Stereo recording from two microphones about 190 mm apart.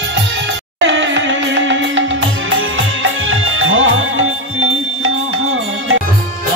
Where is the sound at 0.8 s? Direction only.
75° right (ahead or behind); by 6.0 s 90° right.